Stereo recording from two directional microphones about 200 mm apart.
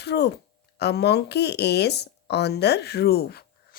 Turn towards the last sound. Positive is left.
turn(degrees=50)  # may be behind; listen again after turning